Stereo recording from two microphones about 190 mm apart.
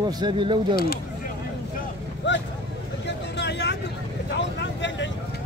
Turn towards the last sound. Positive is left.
turn(degrees=70)  # may be behind; listen again after turning